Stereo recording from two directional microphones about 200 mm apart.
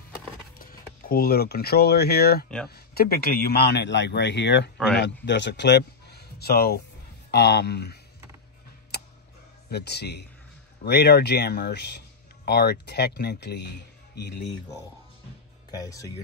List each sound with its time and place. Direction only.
0.6 s a man's voice: 45° left (ahead or behind)
8.9 s tick-tock: 55° left (ahead or behind)
9.7 s a man's voice: 55° left (ahead or behind)
15.7 s speech: 15° left (ahead or behind)